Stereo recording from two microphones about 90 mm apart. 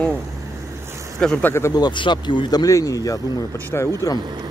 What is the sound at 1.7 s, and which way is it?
Speech, 55° left (ahead or behind).